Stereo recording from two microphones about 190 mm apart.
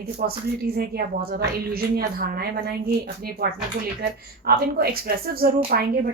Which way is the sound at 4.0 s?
55° right (ahead or behind).